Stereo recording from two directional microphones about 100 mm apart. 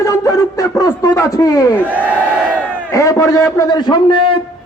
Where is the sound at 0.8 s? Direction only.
35° left (ahead or behind).